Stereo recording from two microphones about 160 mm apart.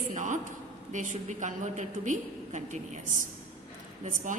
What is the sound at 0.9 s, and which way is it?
A woman's voice, 50° right (ahead or behind).